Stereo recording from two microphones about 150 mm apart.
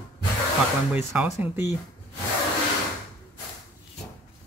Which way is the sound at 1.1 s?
15° right (ahead or behind).